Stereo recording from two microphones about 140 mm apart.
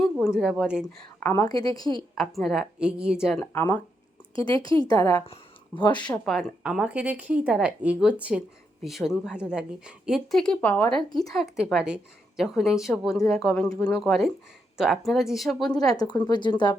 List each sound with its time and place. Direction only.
0.0 s a woman's voice: 5° right (ahead or behind)
1.2 s a woman's voice: 20° left (ahead or behind)
2.1 s speech: centre (ahead or behind)
3.3 s speech: 10° left (ahead or behind)
4.6 s a woman's voice: 35° right (ahead or behind)
4.9 s a woman's voice: 25° left (ahead or behind)
5.2 s speech: 40° left (ahead or behind)
6.1 s speech: centre (ahead or behind)
15.7 s speech: 25° left (ahead or behind)